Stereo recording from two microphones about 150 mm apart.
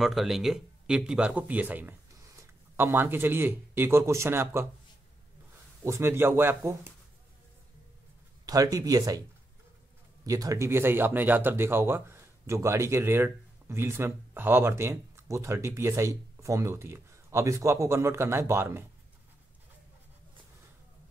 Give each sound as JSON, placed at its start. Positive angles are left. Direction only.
{"t": 0.0, "sound": "speech", "side_deg": 0}
{"t": 5.9, "sound": "speech", "side_deg": -15}
{"t": 8.5, "sound": "speech", "side_deg": -25}
{"t": 10.2, "sound": "speech", "side_deg": -25}